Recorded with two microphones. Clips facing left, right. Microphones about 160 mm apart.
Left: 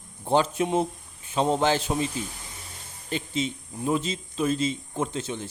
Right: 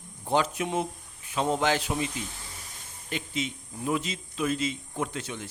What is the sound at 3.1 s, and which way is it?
A man's voice, 30° left (ahead or behind).